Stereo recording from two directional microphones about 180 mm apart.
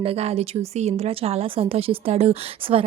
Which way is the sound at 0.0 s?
35° right (ahead or behind).